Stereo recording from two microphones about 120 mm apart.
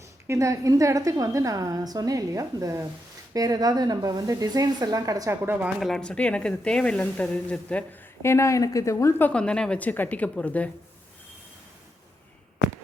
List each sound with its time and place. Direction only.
0.3 s a woman's voice: 25° right (ahead or behind)
5.8 s speech: 5° left (ahead or behind)
8.2 s speech: 25° left (ahead or behind)